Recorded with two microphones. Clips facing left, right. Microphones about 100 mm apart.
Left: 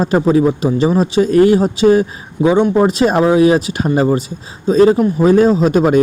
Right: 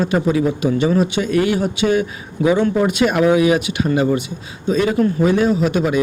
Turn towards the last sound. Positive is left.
turn(degrees=40)  # may be behind; listen again after turning